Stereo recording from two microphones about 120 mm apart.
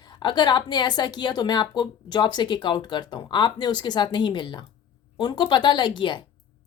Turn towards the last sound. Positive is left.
turn(degrees=40)  # may be behind; listen again after turning